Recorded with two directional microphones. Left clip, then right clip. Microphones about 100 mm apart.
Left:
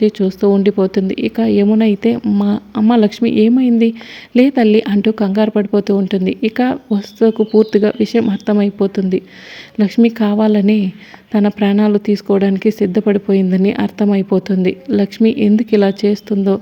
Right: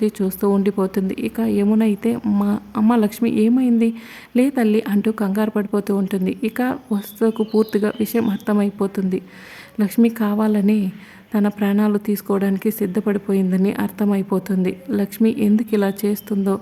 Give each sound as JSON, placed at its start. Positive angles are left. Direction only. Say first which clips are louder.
{"t": 0.0, "sound": "a woman's voice", "louder": "left 7 dB", "side_deg": 10}